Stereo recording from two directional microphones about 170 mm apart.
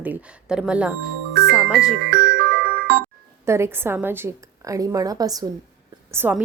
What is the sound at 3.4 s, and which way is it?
A woman's voice, 15° right (ahead or behind).